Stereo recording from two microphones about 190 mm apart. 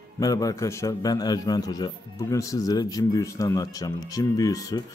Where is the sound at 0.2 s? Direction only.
20° left (ahead or behind).